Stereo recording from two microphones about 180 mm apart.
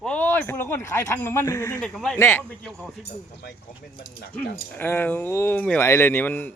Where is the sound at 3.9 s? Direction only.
60° left (ahead or behind).